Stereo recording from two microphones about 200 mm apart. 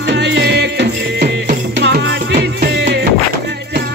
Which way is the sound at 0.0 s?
60° right (ahead or behind).